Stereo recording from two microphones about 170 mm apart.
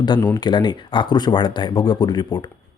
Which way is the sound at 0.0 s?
25° left (ahead or behind).